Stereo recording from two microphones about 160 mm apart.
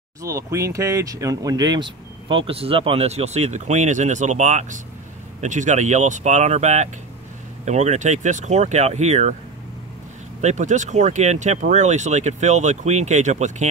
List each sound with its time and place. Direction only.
0.2 s speech: 20° right (ahead or behind); by 9.3 s 45° right (ahead or behind)
10.4 s speech: 50° right (ahead or behind)